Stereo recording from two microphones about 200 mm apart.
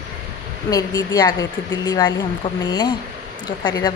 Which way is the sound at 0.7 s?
20° left (ahead or behind).